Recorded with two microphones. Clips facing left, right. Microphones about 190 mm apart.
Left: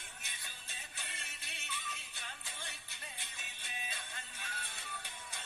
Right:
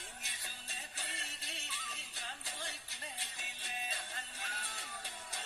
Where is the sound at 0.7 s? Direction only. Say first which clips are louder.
Right 3 dB; 35° right (ahead or behind).